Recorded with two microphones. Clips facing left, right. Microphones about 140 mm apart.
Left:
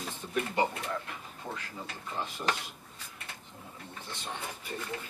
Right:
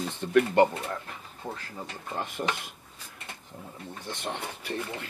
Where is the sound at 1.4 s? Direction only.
20° right (ahead or behind).